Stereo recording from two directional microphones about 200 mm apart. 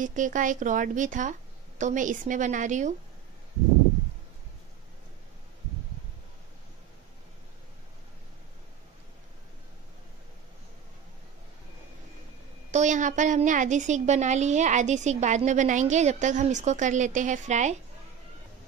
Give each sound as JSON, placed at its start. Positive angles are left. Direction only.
{"t": 0.0, "sound": "a woman's voice", "side_deg": -40}
{"t": 12.7, "sound": "a woman's voice", "side_deg": -40}